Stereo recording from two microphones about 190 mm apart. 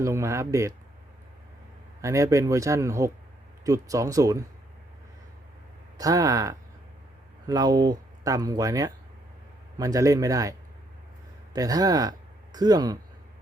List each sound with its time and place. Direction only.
0.0 s a man's voice: 15° right (ahead or behind)
2.0 s a man's voice: 15° right (ahead or behind)
6.0 s a man's voice: 20° right (ahead or behind)
11.5 s speech: 20° right (ahead or behind)